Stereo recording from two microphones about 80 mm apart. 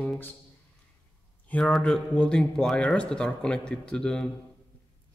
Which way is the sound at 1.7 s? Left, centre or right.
Centre.